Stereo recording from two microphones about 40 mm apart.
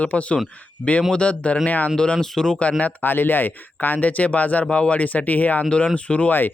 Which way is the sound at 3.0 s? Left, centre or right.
Left.